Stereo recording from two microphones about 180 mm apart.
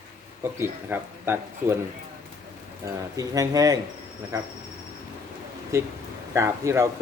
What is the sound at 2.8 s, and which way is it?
Speech, 20° right (ahead or behind).